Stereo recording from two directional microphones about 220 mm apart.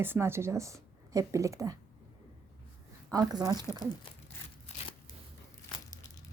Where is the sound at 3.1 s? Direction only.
15° right (ahead or behind).